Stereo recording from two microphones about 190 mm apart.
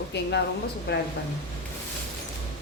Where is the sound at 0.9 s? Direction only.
60° left (ahead or behind).